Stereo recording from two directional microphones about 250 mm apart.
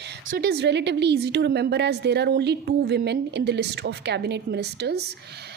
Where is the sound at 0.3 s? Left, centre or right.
Right.